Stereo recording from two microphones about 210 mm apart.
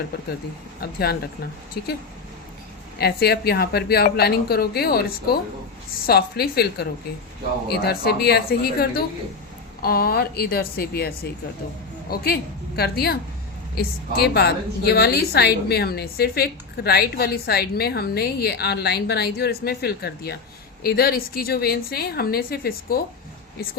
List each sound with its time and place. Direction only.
0.8 s a woman's voice: 50° left (ahead or behind)
3.0 s a woman's voice: 50° left (ahead or behind)